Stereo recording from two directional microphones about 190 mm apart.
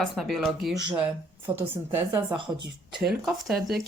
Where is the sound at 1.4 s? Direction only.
10° right (ahead or behind).